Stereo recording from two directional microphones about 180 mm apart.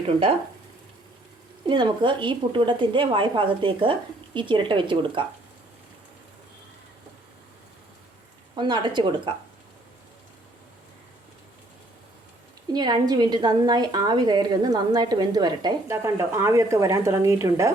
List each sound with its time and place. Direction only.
1.6 s a woman's voice: 25° right (ahead or behind)
8.5 s a woman's voice: 25° right (ahead or behind)
12.7 s a woman's voice: 20° right (ahead or behind)